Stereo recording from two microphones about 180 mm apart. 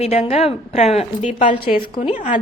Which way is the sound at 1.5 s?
55° left (ahead or behind).